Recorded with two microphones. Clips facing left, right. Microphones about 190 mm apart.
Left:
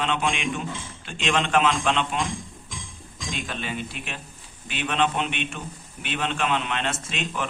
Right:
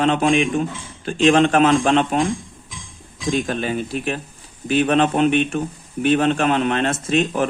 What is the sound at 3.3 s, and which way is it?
Speech, 45° right (ahead or behind).